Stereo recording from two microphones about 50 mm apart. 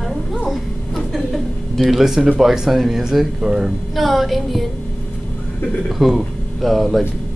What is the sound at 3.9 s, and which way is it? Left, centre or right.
Speech, centre.